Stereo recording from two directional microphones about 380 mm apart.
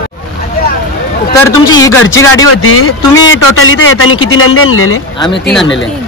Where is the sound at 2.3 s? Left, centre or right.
Left.